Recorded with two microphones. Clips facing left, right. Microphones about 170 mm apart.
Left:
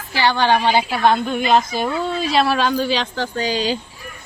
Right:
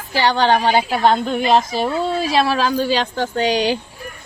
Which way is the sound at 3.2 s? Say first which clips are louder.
Right 3 dB; 65° right (ahead or behind).